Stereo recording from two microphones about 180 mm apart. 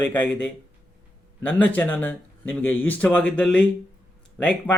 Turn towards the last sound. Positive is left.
turn(degrees=10)  # may be behind; listen again after turning